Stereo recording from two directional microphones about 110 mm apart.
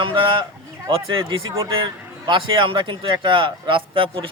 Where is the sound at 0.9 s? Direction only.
50° right (ahead or behind).